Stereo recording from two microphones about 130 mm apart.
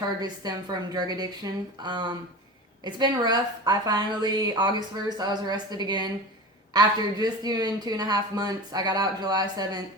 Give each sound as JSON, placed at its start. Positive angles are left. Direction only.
{"t": 0.2, "sound": "a woman's voice", "side_deg": -30}